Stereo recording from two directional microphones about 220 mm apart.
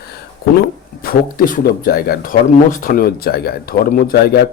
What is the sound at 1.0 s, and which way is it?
Speech, 40° left (ahead or behind).